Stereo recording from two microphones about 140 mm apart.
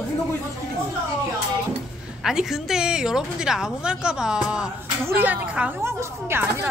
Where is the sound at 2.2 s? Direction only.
5° right (ahead or behind).